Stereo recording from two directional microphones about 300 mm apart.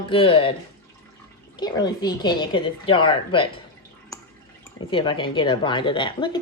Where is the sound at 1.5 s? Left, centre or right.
Centre.